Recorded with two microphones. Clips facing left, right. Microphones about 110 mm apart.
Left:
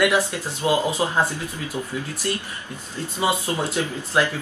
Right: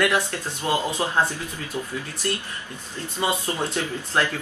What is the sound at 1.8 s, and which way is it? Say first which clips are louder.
Speech: even; 15° left (ahead or behind).